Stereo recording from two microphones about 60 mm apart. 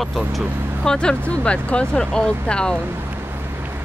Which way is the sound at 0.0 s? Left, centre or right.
Centre.